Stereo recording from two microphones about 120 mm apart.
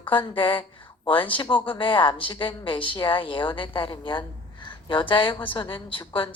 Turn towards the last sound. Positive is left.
turn(degrees=45)  # may be behind; listen again after turning